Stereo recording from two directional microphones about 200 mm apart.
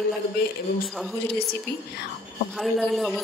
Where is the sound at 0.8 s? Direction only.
Centre (ahead or behind).